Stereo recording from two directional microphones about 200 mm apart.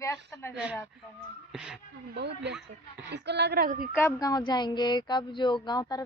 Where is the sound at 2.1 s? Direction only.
60° right (ahead or behind).